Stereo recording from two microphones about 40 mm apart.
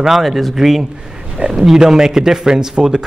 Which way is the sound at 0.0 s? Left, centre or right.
Centre.